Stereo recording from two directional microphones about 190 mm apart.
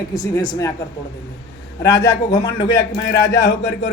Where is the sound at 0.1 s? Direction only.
20° left (ahead or behind).